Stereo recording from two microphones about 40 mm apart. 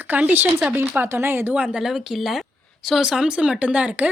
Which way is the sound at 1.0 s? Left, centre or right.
Right.